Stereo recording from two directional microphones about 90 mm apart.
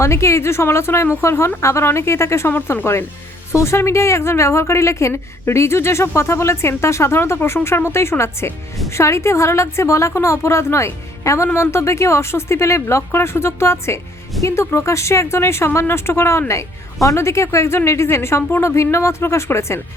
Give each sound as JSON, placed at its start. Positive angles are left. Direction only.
{"t": 0.0, "sound": "a woman's voice", "side_deg": 30}